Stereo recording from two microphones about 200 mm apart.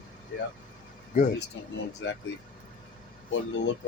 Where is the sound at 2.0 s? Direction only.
70° left (ahead or behind).